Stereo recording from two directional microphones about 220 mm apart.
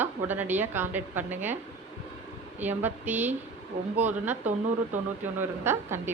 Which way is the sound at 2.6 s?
10° right (ahead or behind).